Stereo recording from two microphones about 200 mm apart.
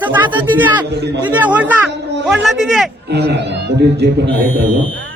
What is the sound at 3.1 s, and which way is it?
Speech, 55° right (ahead or behind).